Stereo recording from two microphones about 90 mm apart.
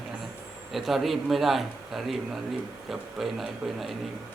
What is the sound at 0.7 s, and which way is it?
A man's voice, centre (ahead or behind).